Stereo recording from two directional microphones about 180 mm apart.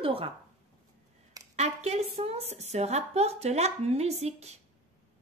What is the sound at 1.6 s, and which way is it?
A woman's voice, 35° right (ahead or behind).